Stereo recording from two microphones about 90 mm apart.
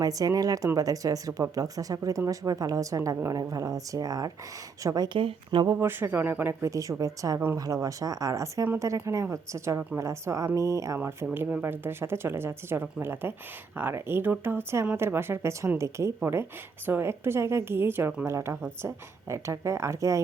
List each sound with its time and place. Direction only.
0.0 s speech: 40° right (ahead or behind)
5.0 s speech: 80° right
5.8 s speech: 25° right (ahead or behind)